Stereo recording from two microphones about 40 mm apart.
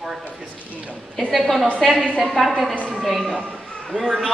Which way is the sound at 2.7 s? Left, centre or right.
Left.